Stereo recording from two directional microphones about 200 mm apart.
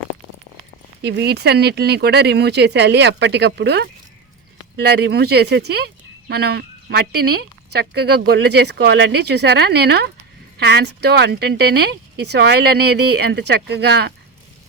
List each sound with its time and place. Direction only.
1.0 s speech: 55° right (ahead or behind)